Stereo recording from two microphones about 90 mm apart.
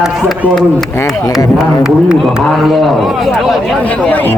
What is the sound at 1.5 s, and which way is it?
A man's voice, 5° right (ahead or behind).